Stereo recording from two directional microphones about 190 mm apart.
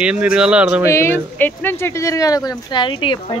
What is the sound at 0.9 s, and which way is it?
Speech, 10° left (ahead or behind).